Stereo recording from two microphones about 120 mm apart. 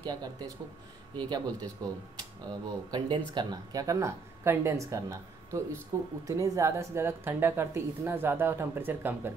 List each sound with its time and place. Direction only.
0.0 s speech: 35° right (ahead or behind); by 9.3 s 15° right (ahead or behind)